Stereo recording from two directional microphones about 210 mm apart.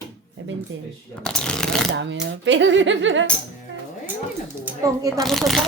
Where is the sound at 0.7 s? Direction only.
65° right (ahead or behind).